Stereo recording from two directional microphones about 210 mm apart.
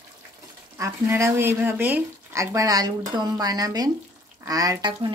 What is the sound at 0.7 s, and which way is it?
Speech, 10° right (ahead or behind).